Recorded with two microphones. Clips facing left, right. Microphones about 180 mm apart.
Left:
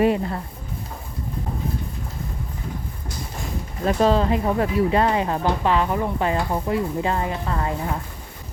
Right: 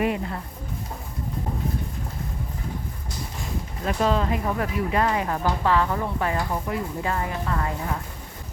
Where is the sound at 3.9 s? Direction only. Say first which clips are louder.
Left 5 dB; 30° left (ahead or behind).